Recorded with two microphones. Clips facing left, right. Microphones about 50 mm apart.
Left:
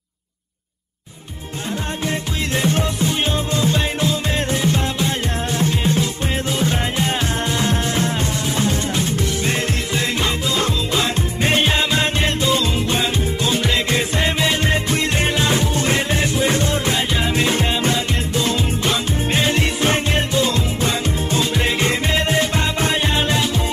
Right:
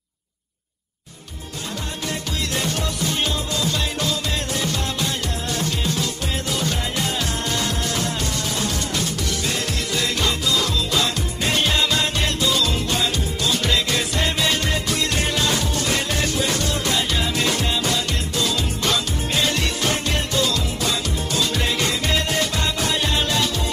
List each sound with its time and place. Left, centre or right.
2.0 s music: left